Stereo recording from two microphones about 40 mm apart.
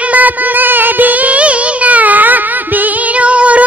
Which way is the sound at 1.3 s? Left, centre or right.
Right.